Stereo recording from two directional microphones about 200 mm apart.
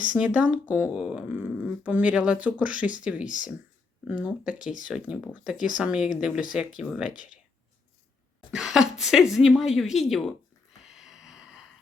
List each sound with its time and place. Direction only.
0.0 s speech: 5° right (ahead or behind)
3.2 s speech: 40° left (ahead or behind)
4.0 s speech: 5° right (ahead or behind)
8.4 s speech: centre (ahead or behind)
10.9 s a sound: 5° right (ahead or behind)